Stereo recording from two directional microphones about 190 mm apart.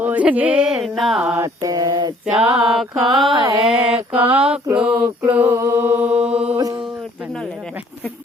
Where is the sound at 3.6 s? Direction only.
5° right (ahead or behind).